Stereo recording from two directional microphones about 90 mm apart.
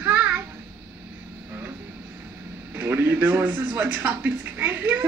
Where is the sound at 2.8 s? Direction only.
25° right (ahead or behind).